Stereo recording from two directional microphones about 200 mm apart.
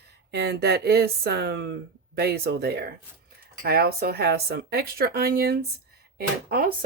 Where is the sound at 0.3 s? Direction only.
55° right (ahead or behind).